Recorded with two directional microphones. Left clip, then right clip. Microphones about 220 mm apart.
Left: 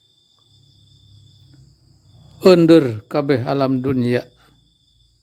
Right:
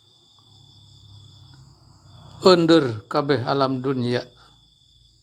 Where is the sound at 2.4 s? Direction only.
35° left (ahead or behind).